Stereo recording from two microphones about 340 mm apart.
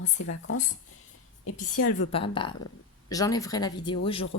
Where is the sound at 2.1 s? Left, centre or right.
Centre.